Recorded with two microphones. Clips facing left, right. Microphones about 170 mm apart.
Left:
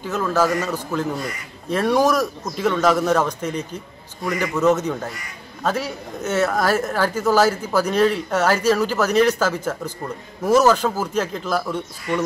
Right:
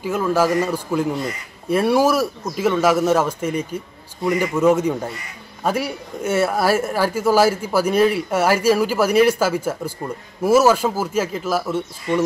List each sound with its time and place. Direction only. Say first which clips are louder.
0.0 s speech: right 2 dB; 10° right (ahead or behind)
12.1 s speech: right 3 dB; 25° right (ahead or behind)